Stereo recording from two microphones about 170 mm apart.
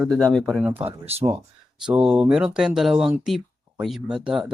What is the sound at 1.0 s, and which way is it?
Speech, 30° right (ahead or behind).